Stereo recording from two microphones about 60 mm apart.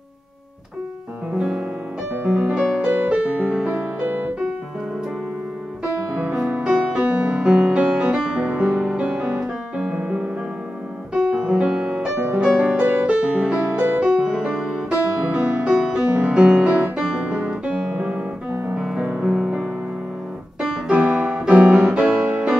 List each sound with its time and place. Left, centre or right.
2.2 s music: centre
4.0 s music: right
6.1 s music: right
16.9 s music: centre
20.6 s keyboard: centre
21.5 s music: centre